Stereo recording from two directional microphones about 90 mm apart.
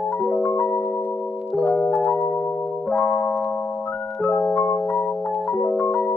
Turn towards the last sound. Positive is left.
turn(degrees=20)  # may be behind; listen again after turning